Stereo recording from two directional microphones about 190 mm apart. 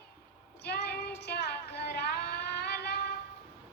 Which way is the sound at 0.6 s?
60° left (ahead or behind).